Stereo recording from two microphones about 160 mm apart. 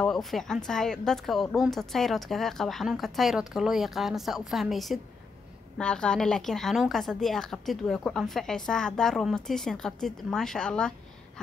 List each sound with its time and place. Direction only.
0.0 s a woman's voice: centre (ahead or behind)